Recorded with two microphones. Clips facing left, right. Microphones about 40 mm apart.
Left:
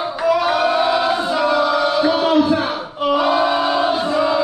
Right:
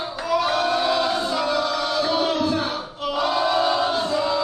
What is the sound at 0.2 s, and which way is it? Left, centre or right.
Choir, centre.